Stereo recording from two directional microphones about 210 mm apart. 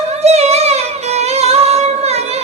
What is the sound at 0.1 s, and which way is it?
Music, 30° right (ahead or behind).